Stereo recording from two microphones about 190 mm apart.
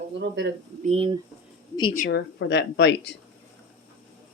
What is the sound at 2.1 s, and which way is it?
Speech, 65° left (ahead or behind).